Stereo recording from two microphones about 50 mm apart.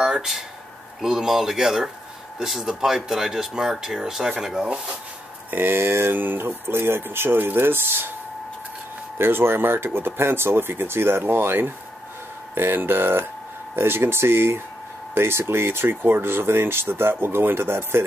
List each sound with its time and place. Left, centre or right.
0.0 s a sound: centre
1.0 s speech: centre
4.6 s speech: right
5.5 s speech: right
9.2 s speech: right